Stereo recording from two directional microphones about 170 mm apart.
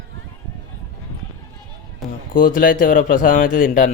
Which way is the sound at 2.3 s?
55° left (ahead or behind).